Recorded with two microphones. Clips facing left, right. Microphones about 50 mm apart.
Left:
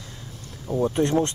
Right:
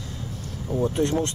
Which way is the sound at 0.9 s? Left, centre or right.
Centre.